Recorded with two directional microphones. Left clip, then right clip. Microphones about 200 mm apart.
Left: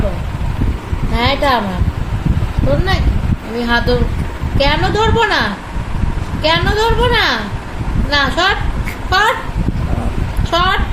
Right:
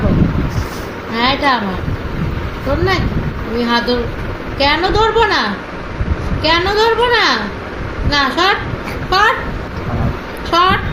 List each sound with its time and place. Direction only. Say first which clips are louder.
1.1 s a sound: even; 45° left (ahead or behind)
3.6 s a woman's voice: even; 45° left (ahead or behind)
10.5 s a woman's voice: right 2 dB; 45° left (ahead or behind)